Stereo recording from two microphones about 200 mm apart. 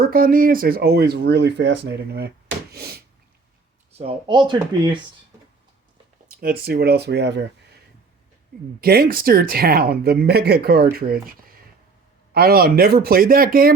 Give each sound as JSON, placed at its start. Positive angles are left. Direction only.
{"t": 0.0, "sound": "speech", "side_deg": -45}
{"t": 2.7, "sound": "a sound", "side_deg": -50}
{"t": 3.9, "sound": "speech", "side_deg": -25}
{"t": 6.4, "sound": "speech", "side_deg": -50}
{"t": 8.8, "sound": "speech", "side_deg": -50}